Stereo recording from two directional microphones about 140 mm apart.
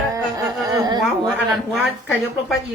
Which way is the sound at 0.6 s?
25° right (ahead or behind).